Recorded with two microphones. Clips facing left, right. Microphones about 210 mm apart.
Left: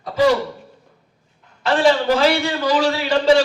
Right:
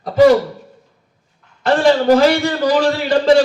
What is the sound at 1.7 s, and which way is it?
A man's voice, 50° right (ahead or behind).